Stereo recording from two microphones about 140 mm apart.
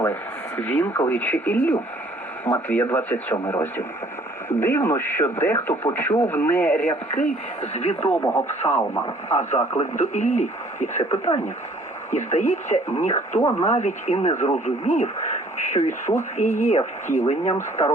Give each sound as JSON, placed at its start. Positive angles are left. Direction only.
{"t": 0.0, "sound": "speech", "side_deg": 15}
{"t": 7.6, "sound": "speech", "side_deg": 50}